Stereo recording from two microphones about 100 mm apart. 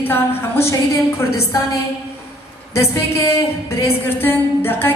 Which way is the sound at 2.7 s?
30° left (ahead or behind).